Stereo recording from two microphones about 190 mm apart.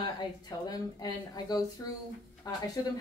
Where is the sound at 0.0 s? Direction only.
20° left (ahead or behind).